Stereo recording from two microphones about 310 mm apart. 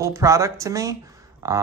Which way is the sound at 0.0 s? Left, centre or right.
Centre.